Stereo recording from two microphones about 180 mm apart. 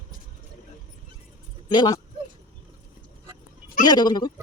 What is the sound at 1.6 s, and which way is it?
Speech, 25° left (ahead or behind).